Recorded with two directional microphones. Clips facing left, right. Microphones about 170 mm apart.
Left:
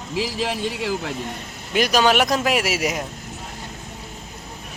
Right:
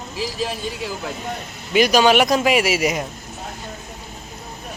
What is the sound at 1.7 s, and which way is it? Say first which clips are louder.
Speech: right 3 dB; centre (ahead or behind).